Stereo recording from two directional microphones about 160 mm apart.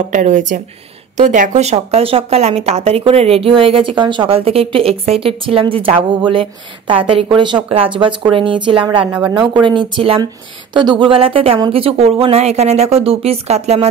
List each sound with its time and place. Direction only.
0.1 s a woman's voice: 50° right (ahead or behind)